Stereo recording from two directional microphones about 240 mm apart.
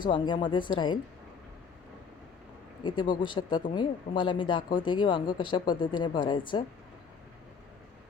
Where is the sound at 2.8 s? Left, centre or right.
Centre.